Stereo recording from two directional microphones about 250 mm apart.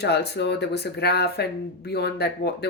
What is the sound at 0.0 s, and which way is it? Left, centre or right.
A woman's voice, left.